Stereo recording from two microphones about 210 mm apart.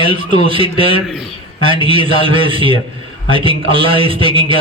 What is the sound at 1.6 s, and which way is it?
A man's voice, 25° right (ahead or behind).